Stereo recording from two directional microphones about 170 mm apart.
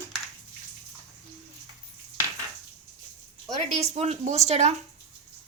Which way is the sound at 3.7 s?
40° right (ahead or behind).